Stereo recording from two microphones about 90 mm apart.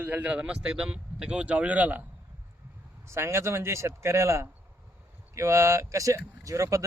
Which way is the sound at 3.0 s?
30° right (ahead or behind).